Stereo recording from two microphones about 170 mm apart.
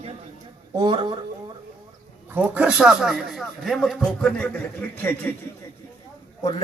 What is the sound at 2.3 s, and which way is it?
A man's voice, 5° right (ahead or behind).